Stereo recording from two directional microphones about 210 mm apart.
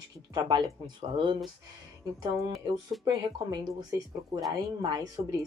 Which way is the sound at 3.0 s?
20° right (ahead or behind).